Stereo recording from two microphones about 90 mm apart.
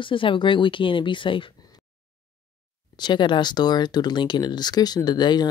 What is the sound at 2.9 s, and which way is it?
Speech, 60° left (ahead or behind).